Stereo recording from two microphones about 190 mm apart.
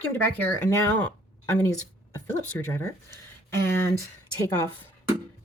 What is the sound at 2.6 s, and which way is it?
Speech, 10° left (ahead or behind).